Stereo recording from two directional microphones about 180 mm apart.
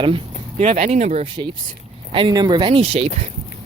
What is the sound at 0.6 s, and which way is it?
Speech, 40° right (ahead or behind).